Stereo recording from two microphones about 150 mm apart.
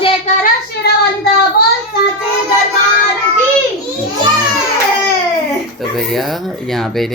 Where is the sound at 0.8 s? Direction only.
90° left.